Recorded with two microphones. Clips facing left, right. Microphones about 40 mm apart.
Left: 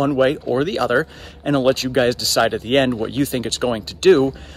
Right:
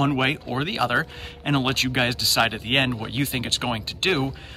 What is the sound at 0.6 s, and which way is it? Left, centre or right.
A man's voice, right.